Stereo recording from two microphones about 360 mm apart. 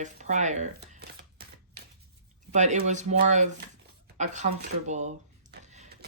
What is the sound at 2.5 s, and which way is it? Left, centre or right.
Speech, centre.